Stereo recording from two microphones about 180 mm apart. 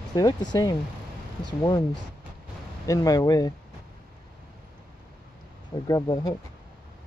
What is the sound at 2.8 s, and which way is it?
Speech, 20° left (ahead or behind).